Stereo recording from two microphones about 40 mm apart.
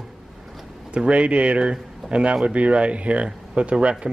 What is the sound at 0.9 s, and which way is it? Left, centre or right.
Speech, right.